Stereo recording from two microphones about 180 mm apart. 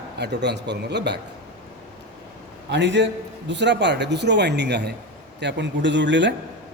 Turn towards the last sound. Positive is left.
turn(degrees=-85)